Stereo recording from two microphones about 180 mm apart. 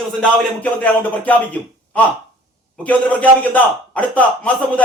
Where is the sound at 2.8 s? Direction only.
10° left (ahead or behind).